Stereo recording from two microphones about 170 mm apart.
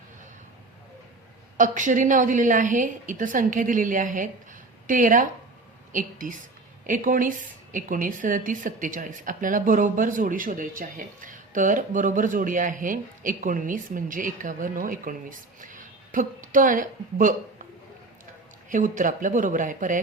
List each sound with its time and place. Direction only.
1.5 s a woman's voice: 50° right (ahead or behind)
18.7 s a woman's voice: 50° right (ahead or behind)